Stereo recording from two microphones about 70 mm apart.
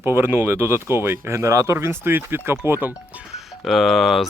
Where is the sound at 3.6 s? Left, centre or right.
Centre.